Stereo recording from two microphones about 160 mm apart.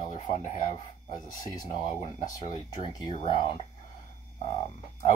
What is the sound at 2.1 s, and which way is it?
Speech, 25° left (ahead or behind).